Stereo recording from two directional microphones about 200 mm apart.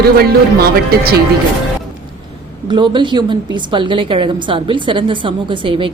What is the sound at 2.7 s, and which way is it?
Speech, 25° right (ahead or behind).